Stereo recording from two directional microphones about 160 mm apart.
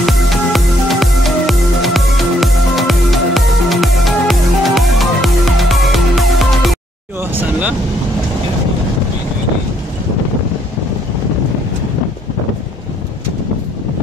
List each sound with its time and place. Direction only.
0.0 s music: centre (ahead or behind)
7.2 s vehicle: 10° right (ahead or behind)